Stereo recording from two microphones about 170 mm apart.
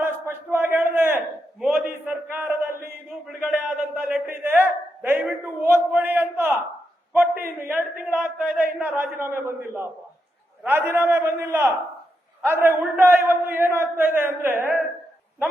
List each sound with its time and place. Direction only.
0.0 s battle cry: 10° right (ahead or behind)
1.6 s a man's voice: 10° right (ahead or behind)